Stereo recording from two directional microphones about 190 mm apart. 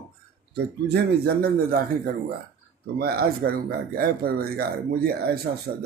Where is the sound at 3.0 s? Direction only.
50° right (ahead or behind).